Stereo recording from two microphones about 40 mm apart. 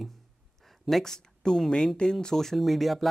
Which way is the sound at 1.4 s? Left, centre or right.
Centre.